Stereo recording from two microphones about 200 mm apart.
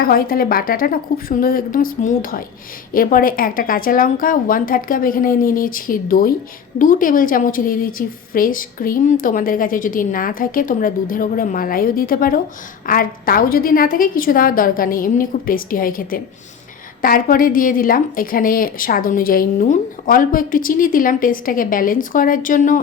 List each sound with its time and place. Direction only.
0.0 s a woman's voice: 45° left (ahead or behind)